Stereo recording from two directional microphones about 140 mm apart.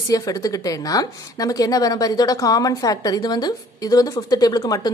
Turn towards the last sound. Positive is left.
turn(degrees=30)  # may be behind; listen again after turning